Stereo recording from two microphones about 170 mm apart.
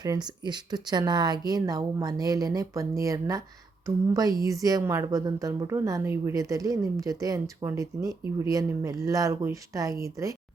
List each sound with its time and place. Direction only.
0.0 s a woman's voice: 25° right (ahead or behind)